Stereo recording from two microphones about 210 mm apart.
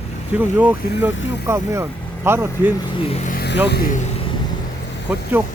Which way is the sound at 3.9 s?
30° left (ahead or behind).